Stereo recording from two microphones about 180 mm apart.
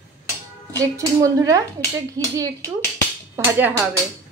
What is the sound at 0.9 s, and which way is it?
Speech, 15° right (ahead or behind).